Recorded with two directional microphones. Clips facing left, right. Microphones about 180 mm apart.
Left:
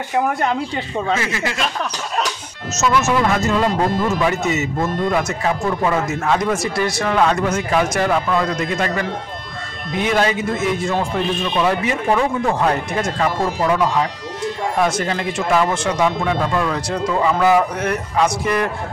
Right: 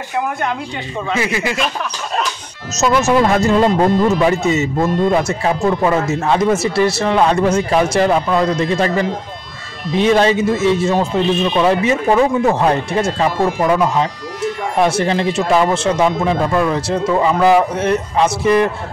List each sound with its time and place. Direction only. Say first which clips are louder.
1.1 s speech: right 6 dB; 15° right (ahead or behind)
2.7 s speech: right 4 dB; 35° right (ahead or behind)